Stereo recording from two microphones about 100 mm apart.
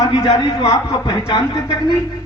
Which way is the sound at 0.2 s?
45° left (ahead or behind).